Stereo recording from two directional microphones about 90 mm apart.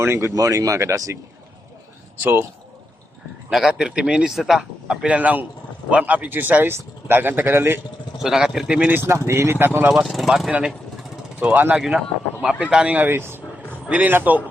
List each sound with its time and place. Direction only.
0.0 s speech: 30° right (ahead or behind)
3.5 s speech: 5° right (ahead or behind)
5.0 s speech: 15° right (ahead or behind)
8.2 s speech: 5° right (ahead or behind)
9.0 s speech: 30° right (ahead or behind)
10.1 s speech: centre (ahead or behind)
11.3 s speech: 20° right (ahead or behind)
11.8 s speech: 5° right (ahead or behind); by 14.4 s 20° right (ahead or behind)